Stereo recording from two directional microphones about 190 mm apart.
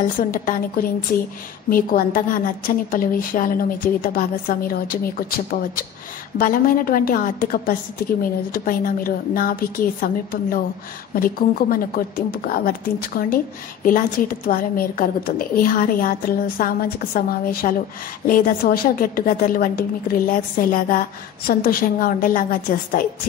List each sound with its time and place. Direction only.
0.0 s a woman's voice: 45° left (ahead or behind)